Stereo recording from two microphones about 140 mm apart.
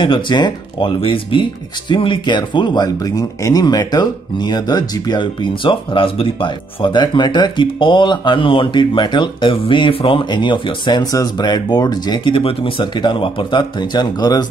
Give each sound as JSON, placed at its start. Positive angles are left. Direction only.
{"t": 0.0, "sound": "speech", "side_deg": 35}